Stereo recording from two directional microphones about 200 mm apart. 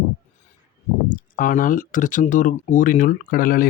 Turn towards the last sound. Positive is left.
turn(degrees=45)  # may be behind; listen again after turning